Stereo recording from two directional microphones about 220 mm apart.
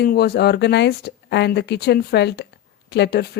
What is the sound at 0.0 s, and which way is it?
Speech, 45° left (ahead or behind).